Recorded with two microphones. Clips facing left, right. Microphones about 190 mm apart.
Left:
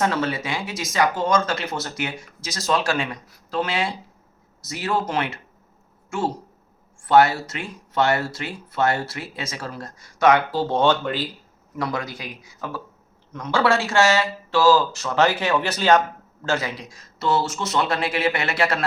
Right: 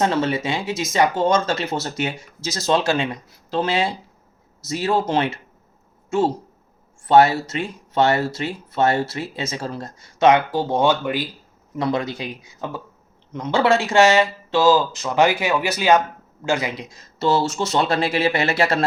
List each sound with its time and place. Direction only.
0.0 s speech: 25° right (ahead or behind)
7.1 s speech: 20° right (ahead or behind)
11.8 s speech: 25° right (ahead or behind)